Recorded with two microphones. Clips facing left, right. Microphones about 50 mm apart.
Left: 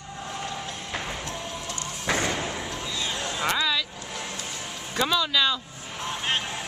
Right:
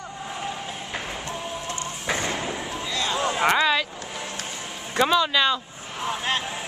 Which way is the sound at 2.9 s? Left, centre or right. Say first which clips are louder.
Right 6 dB; right.